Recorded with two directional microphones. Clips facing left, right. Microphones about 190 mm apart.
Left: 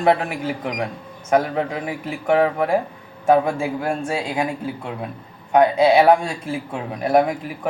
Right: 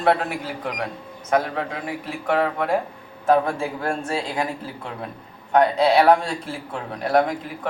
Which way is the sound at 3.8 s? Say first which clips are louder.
Left 2 dB; 5° left (ahead or behind).